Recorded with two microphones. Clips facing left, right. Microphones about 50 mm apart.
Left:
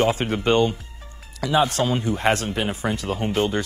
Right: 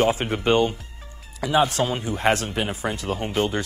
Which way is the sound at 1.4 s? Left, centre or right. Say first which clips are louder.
Left 1 dB; right.